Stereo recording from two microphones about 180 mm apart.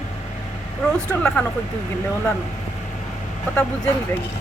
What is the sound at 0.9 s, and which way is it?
Speech, 5° left (ahead or behind).